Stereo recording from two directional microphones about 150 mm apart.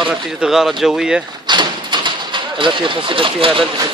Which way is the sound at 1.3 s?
30° right (ahead or behind).